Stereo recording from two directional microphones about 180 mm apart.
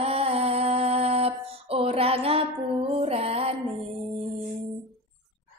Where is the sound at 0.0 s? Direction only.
35° right (ahead or behind).